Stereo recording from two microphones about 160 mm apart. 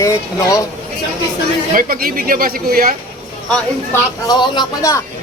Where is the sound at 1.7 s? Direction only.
60° right (ahead or behind).